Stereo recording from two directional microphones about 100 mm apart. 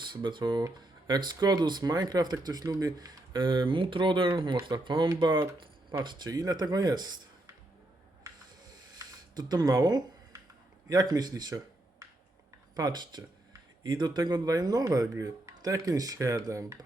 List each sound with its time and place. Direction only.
0.0 s speech: 50° right (ahead or behind)
9.0 s a sound: 45° right (ahead or behind)
10.8 s speech: 40° right (ahead or behind)